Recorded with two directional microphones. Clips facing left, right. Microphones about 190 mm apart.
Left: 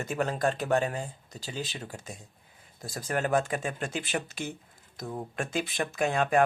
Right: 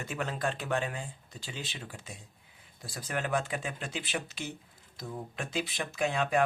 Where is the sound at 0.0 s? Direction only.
45° left (ahead or behind).